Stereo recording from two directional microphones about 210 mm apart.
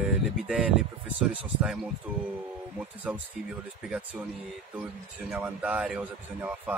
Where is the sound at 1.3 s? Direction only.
5° right (ahead or behind).